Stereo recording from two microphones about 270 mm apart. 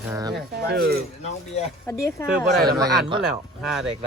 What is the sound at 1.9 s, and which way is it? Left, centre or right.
Speech, centre.